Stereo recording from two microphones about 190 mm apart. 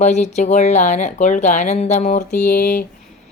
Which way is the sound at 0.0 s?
35° left (ahead or behind).